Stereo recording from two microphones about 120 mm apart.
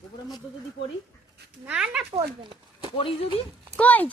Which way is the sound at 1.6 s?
10° right (ahead or behind).